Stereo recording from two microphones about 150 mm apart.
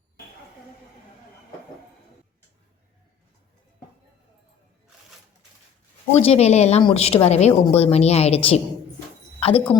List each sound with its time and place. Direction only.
6.1 s a woman's voice: 45° left (ahead or behind)